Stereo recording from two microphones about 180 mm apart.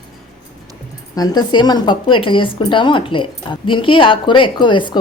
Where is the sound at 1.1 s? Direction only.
20° left (ahead or behind).